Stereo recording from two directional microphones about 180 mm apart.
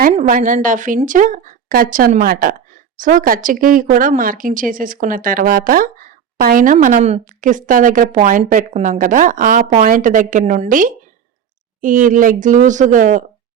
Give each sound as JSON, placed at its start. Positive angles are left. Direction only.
{"t": 0.1, "sound": "speech", "side_deg": -45}